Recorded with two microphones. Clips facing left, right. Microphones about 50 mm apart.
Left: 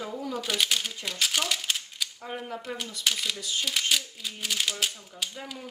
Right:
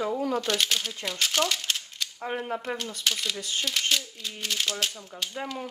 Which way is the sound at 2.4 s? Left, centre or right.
Right.